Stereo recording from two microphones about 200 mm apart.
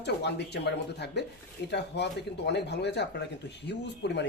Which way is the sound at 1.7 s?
60° left (ahead or behind).